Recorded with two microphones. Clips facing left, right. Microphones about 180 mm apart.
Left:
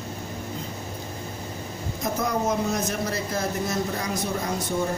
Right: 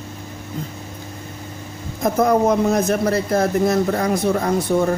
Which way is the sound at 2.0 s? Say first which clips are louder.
Right 10 dB; 55° right (ahead or behind).